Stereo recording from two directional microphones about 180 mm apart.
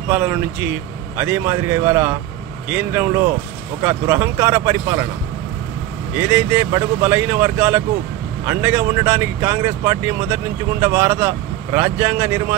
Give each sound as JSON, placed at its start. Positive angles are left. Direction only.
{"t": 0.1, "sound": "speech", "side_deg": -10}
{"t": 6.1, "sound": "speech", "side_deg": -10}